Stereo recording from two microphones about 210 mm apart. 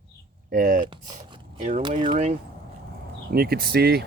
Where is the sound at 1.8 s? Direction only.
25° right (ahead or behind).